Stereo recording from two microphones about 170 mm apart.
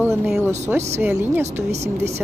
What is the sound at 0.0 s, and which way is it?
Speech, 10° right (ahead or behind).